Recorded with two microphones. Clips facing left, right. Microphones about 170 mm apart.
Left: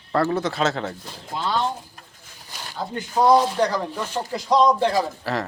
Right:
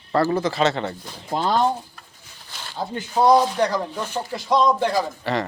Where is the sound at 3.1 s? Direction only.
5° right (ahead or behind).